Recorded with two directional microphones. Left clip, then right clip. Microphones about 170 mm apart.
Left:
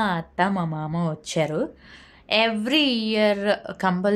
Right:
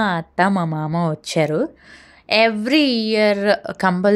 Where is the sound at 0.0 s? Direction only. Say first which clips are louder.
Right 5 dB; 35° right (ahead or behind).